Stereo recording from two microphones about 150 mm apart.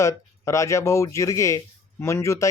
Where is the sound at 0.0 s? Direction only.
20° left (ahead or behind).